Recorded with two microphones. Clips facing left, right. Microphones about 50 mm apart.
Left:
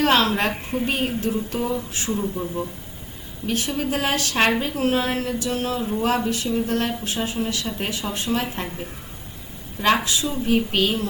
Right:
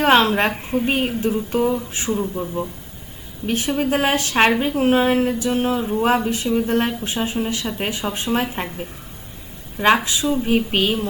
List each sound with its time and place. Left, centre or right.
0.0 s speech: right
2.0 s speech: centre
3.4 s speech: right
9.7 s speech: right